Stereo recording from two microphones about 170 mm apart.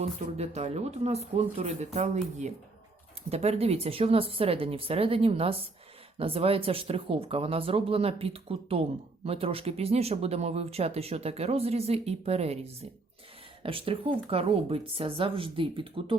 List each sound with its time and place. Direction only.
0.0 s speech: 40° right (ahead or behind)
3.2 s speech: 35° right (ahead or behind)